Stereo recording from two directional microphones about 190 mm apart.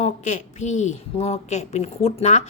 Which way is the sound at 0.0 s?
40° left (ahead or behind).